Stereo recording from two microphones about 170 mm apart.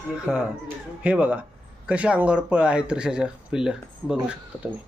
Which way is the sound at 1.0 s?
5° right (ahead or behind).